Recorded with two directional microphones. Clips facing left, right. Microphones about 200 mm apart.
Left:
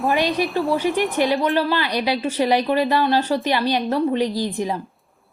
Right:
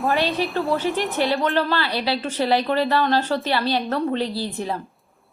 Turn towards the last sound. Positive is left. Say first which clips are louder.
# left 4 dB
turn(degrees=15)  # may be behind; listen again after turning